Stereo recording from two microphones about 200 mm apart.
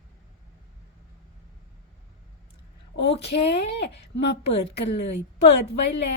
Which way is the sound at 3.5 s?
60° left (ahead or behind).